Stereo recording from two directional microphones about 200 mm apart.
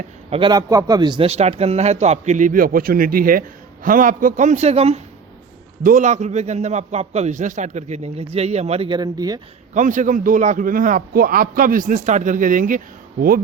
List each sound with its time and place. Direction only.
0.3 s a man's voice: 25° right (ahead or behind)
9.7 s a man's voice: 40° right (ahead or behind)